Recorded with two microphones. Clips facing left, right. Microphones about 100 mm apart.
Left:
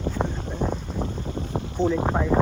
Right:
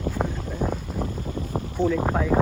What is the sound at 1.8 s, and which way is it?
Speech, 45° right (ahead or behind).